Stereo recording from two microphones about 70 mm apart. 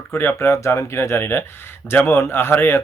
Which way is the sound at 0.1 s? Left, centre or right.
Left.